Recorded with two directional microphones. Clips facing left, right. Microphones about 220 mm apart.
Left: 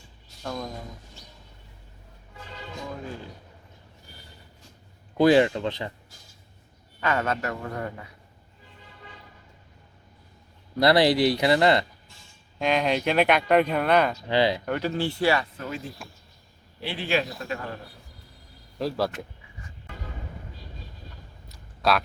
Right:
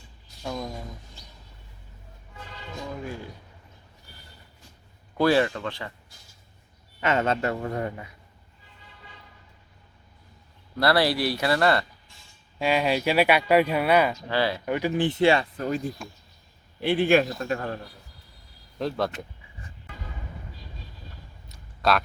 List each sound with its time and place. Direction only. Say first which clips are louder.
0.4 s speech: right 1 dB; 5° right (ahead or behind)
5.1 s speech: left 3 dB; 20° left (ahead or behind)
7.0 s speech: right 2 dB; 25° right (ahead or behind)
10.8 s speech: left 3 dB; 20° left (ahead or behind)
12.5 s speech: even; 5° right (ahead or behind)
14.3 s speech: left 3 dB; 20° left (ahead or behind)
14.6 s speech: right 2 dB; 10° right (ahead or behind); by 15.8 s 35° right (ahead or behind)
16.0 s speech: right 4 dB; centre (ahead or behind)
16.8 s speech: right 7 dB; 50° right (ahead or behind)
18.8 s speech: left 1 dB; 5° left (ahead or behind)
21.5 s a sound: even; centre (ahead or behind)